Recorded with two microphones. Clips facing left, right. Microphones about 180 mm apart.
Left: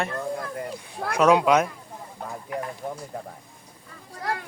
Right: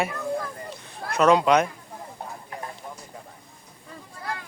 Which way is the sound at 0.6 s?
70° left (ahead or behind).